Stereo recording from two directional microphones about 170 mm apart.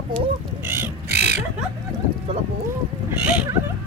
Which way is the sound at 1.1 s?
45° left (ahead or behind).